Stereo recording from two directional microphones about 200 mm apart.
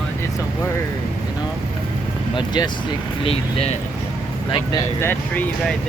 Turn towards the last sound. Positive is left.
turn(degrees=10)  # may be behind; listen again after turning